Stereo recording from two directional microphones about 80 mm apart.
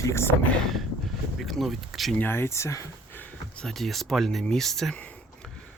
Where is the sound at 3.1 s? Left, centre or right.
Left.